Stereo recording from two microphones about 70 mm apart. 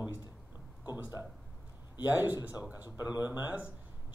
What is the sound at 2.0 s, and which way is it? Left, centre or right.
Speech, right.